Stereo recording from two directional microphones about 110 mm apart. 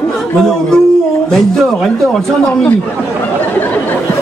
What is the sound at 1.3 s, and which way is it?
Speech, centre (ahead or behind).